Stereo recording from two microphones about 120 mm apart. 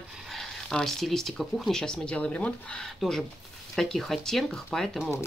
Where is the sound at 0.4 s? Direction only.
5° left (ahead or behind).